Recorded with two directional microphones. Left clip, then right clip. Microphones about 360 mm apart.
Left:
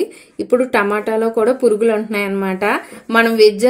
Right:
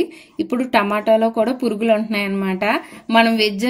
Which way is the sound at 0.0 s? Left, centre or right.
Right.